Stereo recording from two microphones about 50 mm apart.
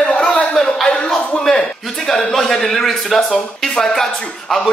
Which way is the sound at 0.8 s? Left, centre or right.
Centre.